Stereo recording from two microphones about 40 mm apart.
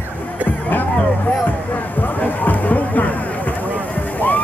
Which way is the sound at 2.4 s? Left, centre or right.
Left.